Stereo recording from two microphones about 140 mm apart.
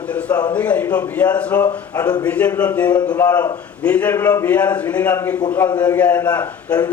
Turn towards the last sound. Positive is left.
turn(degrees=10)  # may be behind; listen again after turning